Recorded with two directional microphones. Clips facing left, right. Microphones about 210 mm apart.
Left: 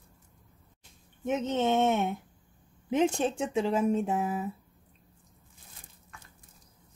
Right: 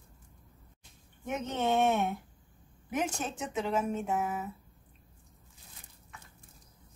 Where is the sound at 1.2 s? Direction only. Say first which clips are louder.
Left 4 dB; 20° left (ahead or behind).